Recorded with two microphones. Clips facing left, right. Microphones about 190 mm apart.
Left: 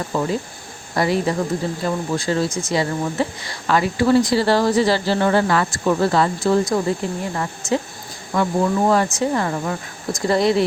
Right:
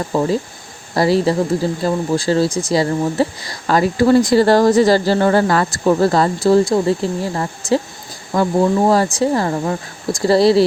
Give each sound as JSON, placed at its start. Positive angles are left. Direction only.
{"t": 0.1, "sound": "speech", "side_deg": -35}